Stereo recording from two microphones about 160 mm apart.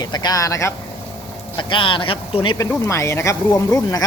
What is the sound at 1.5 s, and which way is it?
Speech, 30° left (ahead or behind).